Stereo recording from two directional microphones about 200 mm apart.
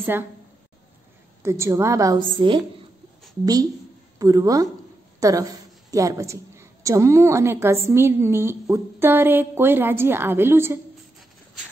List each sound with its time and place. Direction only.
0.0 s a woman's voice: 10° right (ahead or behind)
1.4 s a woman's voice: 15° right (ahead or behind)
4.2 s a woman's voice: 15° right (ahead or behind)